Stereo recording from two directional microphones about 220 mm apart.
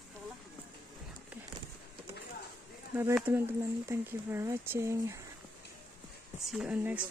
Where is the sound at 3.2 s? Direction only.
10° right (ahead or behind).